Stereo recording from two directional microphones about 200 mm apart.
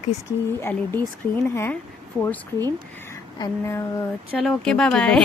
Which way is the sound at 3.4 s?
15° left (ahead or behind).